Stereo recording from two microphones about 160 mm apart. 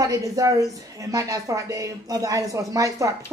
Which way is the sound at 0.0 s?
20° right (ahead or behind).